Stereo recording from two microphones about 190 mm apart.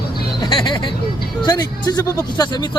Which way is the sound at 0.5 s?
25° left (ahead or behind).